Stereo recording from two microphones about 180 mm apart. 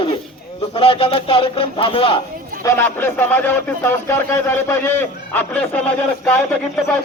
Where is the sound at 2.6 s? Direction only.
10° left (ahead or behind).